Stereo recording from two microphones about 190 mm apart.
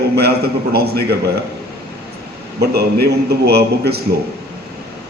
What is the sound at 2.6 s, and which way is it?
A man's voice, 55° right (ahead or behind).